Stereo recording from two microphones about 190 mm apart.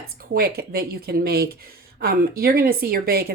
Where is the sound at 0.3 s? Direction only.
55° right (ahead or behind).